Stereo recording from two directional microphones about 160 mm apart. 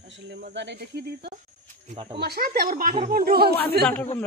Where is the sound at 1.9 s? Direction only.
30° right (ahead or behind).